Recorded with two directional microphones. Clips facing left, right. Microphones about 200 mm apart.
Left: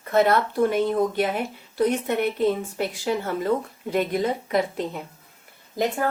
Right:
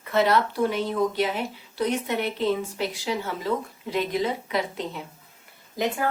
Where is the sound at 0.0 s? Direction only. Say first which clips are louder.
Left 2 dB; 50° left (ahead or behind).